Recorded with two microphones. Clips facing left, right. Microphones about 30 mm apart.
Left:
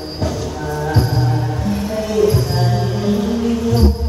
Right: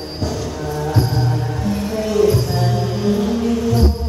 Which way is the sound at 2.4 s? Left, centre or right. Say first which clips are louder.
Left 1 dB; centre.